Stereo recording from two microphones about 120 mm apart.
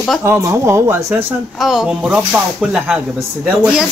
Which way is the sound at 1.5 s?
5° right (ahead or behind).